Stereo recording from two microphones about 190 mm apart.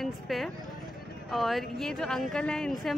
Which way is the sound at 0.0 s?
Centre (ahead or behind).